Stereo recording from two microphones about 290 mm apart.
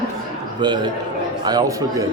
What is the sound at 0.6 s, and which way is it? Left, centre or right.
A man's voice, centre.